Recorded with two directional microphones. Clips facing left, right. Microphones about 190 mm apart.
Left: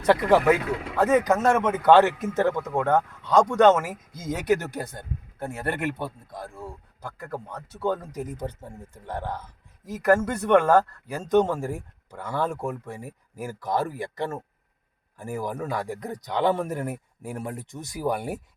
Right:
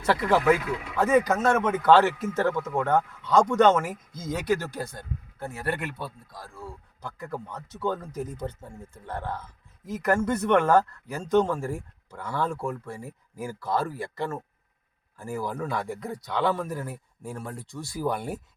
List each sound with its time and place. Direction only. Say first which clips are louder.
0.0 s speech: left 3 dB; 15° left (ahead or behind)
6.3 s speech: left 5 dB; 20° left (ahead or behind)
7.0 s speech: even; 10° left (ahead or behind)